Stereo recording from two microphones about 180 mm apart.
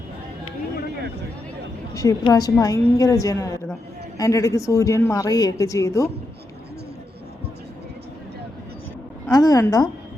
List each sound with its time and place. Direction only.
1.9 s a woman's voice: 20° left (ahead or behind)
9.3 s a woman's voice: 20° left (ahead or behind)